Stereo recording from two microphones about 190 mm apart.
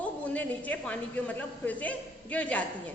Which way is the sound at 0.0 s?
10° left (ahead or behind).